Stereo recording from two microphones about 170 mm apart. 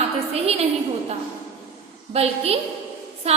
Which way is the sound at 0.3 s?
35° right (ahead or behind).